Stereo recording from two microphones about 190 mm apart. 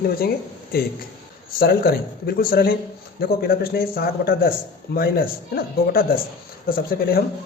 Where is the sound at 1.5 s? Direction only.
55° left (ahead or behind).